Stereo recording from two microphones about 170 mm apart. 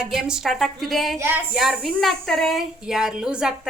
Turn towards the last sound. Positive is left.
turn(degrees=-5)  # may be behind; listen again after turning